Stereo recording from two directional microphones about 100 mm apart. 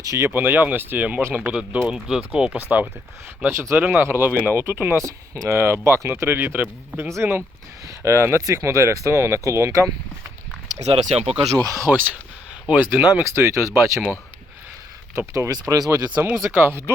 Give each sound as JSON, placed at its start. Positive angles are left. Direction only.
{"t": 0.0, "sound": "speech", "side_deg": -30}
{"t": 0.3, "sound": "speech", "side_deg": -20}
{"t": 3.4, "sound": "speech", "side_deg": -25}
{"t": 10.8, "sound": "speech", "side_deg": -90}
{"t": 11.5, "sound": "speech", "side_deg": -40}
{"t": 11.9, "sound": "speech", "side_deg": -20}
{"t": 15.3, "sound": "speech", "side_deg": -30}
{"t": 16.6, "sound": "speech", "side_deg": -20}